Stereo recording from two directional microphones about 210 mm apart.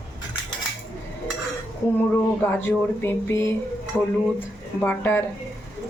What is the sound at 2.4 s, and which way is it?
Speech, 10° left (ahead or behind).